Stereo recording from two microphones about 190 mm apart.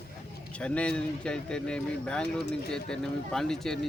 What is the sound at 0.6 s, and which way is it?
Speech, 5° left (ahead or behind).